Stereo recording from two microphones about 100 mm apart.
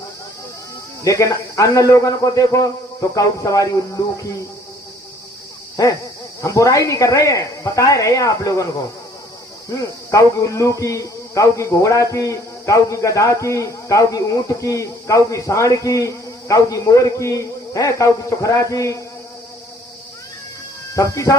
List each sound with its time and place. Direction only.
1.0 s a man's voice: 35° left (ahead or behind)
5.8 s a man's voice: 35° left (ahead or behind)
9.7 s a man's voice: 35° left (ahead or behind)
20.9 s a man's voice: 35° left (ahead or behind)